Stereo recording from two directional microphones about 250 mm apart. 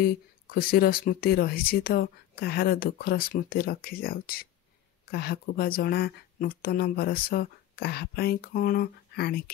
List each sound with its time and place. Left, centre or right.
0.0 s speech: left